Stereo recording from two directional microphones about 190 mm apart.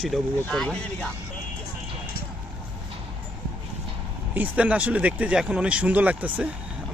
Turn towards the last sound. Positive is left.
turn(degrees=-10)  # may be behind; listen again after turning